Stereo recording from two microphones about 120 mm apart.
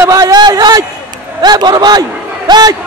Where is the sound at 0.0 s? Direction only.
30° right (ahead or behind).